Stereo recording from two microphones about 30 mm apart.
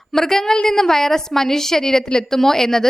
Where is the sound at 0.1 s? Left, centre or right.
Centre.